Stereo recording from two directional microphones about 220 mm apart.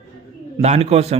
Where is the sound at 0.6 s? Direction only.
30° right (ahead or behind).